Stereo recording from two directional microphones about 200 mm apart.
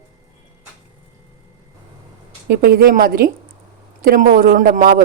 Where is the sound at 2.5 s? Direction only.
50° right (ahead or behind).